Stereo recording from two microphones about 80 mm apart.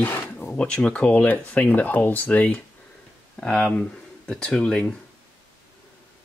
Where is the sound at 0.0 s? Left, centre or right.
Left.